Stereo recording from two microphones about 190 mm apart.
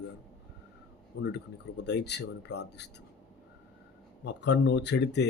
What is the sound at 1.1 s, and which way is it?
Speech, 65° left (ahead or behind).